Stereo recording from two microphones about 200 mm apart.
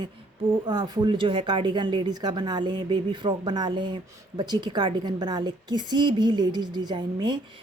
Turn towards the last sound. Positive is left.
turn(degrees=-20)  # may be behind; listen again after turning